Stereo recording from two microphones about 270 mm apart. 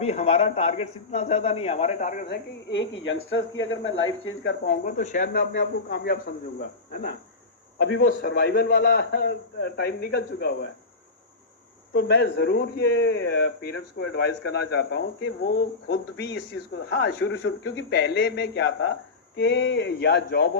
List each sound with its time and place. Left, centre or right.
0.0 s a man's voice: left
11.9 s a man's voice: left